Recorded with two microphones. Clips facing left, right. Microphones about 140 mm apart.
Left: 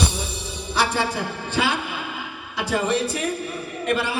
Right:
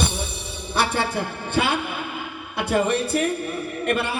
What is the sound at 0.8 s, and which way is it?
Speech, 55° right (ahead or behind).